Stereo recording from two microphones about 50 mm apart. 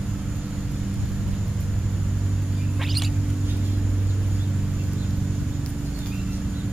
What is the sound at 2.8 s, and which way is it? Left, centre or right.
Rodents, centre.